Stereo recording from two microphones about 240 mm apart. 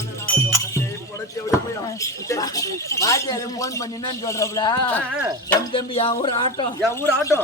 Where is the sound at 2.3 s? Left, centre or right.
Centre.